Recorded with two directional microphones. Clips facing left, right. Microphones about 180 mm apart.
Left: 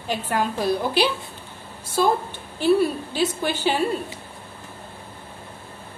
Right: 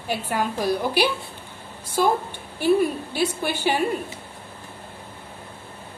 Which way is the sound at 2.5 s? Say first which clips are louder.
Left 1 dB; 10° right (ahead or behind).